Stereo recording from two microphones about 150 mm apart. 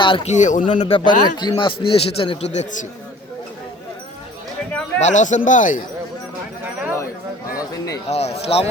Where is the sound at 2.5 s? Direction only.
50° left (ahead or behind).